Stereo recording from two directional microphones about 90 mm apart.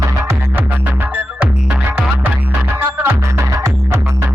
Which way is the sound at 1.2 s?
15° right (ahead or behind).